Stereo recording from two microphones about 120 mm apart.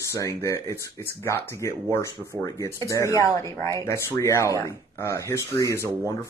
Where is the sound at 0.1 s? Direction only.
25° left (ahead or behind).